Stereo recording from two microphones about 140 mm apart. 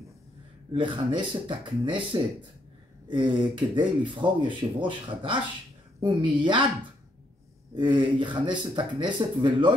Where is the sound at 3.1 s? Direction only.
35° right (ahead or behind).